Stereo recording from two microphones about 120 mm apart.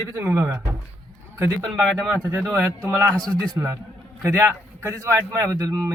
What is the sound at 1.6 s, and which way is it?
Speech, 5° left (ahead or behind).